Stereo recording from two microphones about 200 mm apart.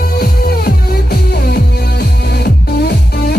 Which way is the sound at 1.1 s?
55° left (ahead or behind).